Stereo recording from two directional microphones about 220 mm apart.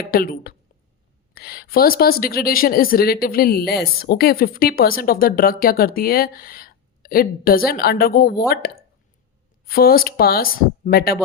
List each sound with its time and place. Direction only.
0.0 s a woman's voice: 45° left (ahead or behind)